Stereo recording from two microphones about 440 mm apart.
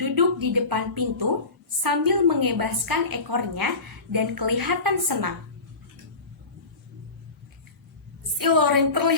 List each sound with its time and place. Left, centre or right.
0.0 s a woman's voice: right
8.4 s a woman's voice: right